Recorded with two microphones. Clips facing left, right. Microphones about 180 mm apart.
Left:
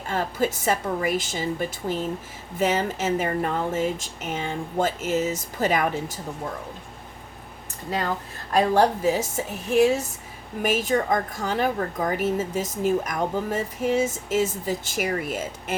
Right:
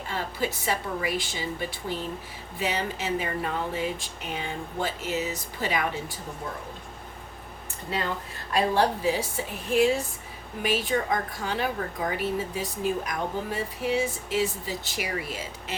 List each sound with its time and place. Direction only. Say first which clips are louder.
0.1 s a woman's voice: left 6 dB; 45° left (ahead or behind)
8.5 s a woman's voice: left 4 dB; 45° left (ahead or behind)
10.6 s a woman's voice: left 4 dB; 45° left (ahead or behind)